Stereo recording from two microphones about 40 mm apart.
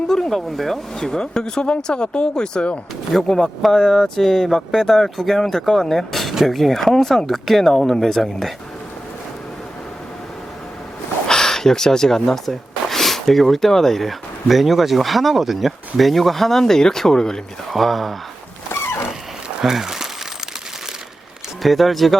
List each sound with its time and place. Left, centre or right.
0.1 s speech: centre
0.9 s speech: centre
7.9 s speech: centre
8.2 s speech: centre
11.3 s speech: centre
17.7 s speech: centre
19.6 s speech: centre
21.6 s speech: centre